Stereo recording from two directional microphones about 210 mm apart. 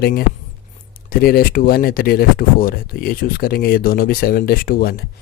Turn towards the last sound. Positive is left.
turn(degrees=45)  # may be behind; listen again after turning